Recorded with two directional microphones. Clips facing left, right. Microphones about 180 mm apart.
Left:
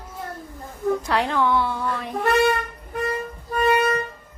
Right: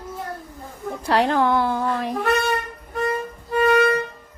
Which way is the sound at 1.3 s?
40° right (ahead or behind).